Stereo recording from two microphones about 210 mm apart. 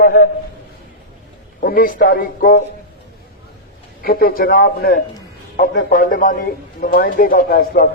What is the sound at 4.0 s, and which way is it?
A man's voice, 45° left (ahead or behind).